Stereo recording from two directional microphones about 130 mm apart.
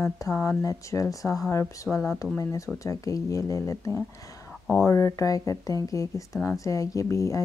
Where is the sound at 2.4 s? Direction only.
25° left (ahead or behind).